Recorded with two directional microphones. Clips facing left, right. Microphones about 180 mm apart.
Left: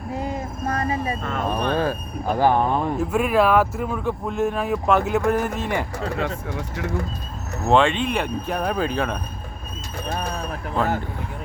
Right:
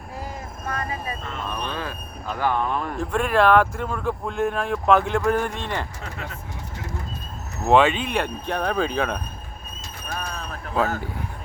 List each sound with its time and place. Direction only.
0.2 s vehicle: 25° left (ahead or behind)
1.2 s speech: 50° left (ahead or behind); by 2.8 s 35° left (ahead or behind)
3.0 s speech: 5° left (ahead or behind)
6.1 s speech: 80° left
7.7 s speech: 5° right (ahead or behind)
10.1 s a sound: 25° left (ahead or behind)